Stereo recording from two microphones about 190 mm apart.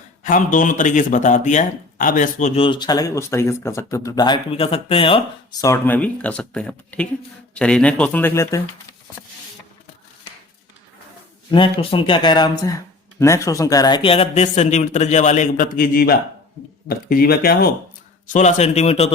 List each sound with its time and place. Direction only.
0.2 s speech: 45° left (ahead or behind)
2.6 s speech: 25° left (ahead or behind)
11.5 s speech: 25° left (ahead or behind); by 17.7 s 55° left (ahead or behind)
18.3 s speech: 40° left (ahead or behind)